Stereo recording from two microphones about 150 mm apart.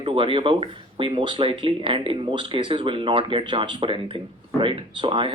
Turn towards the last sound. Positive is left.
turn(degrees=-35)  # may be behind; listen again after turning